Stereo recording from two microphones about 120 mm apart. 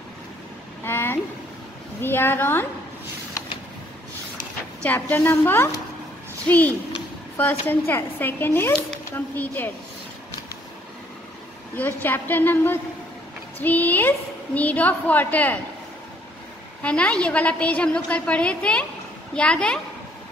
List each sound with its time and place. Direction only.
0.8 s a sound: 20° left (ahead or behind)
2.0 s a woman's voice: 20° left (ahead or behind)
4.8 s a woman's voice: 15° left (ahead or behind)
11.7 s a woman's voice: 15° left (ahead or behind)
16.8 s a woman's voice: 10° left (ahead or behind)